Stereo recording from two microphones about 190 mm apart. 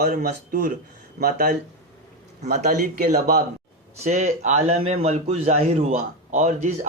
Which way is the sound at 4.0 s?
35° right (ahead or behind).